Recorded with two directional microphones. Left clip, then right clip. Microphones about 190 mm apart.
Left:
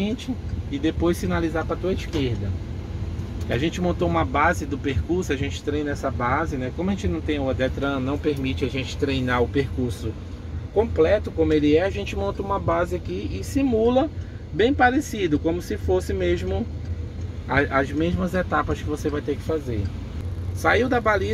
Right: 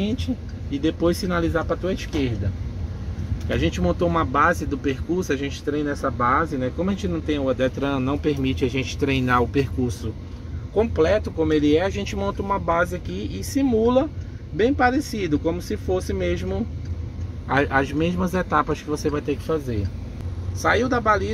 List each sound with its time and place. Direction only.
0.7 s speech: 15° right (ahead or behind)
3.4 s speech: 15° right (ahead or behind)
13.6 s speech: 20° right (ahead or behind)
17.5 s speech: 25° right (ahead or behind)
20.8 s speech: 10° right (ahead or behind)